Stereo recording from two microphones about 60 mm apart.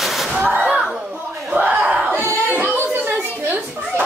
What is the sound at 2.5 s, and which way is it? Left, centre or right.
Children playing, right.